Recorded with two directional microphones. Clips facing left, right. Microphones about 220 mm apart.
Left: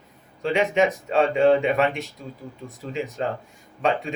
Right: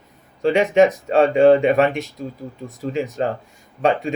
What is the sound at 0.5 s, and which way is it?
Speech, 40° right (ahead or behind).